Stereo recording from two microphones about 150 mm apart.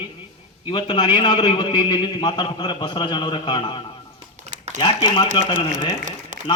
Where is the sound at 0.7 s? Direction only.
30° left (ahead or behind).